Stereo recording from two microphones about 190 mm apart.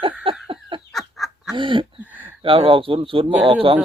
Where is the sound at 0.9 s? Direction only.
Centre (ahead or behind).